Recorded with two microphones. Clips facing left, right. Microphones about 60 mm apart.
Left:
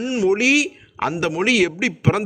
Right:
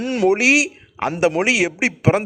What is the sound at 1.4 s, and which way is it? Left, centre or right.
Speech, centre.